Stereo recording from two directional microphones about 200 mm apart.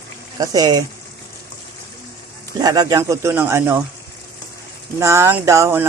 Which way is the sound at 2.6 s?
20° right (ahead or behind).